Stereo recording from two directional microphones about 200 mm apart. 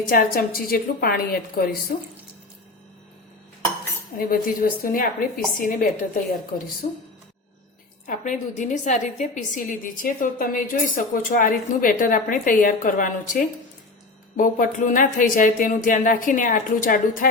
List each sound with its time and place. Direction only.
0.0 s a woman's voice: 45° left (ahead or behind)
4.2 s a woman's voice: 45° left (ahead or behind)
8.0 s a woman's voice: 40° left (ahead or behind)